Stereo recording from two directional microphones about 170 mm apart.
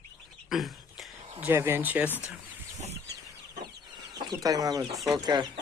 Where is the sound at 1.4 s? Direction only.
15° right (ahead or behind).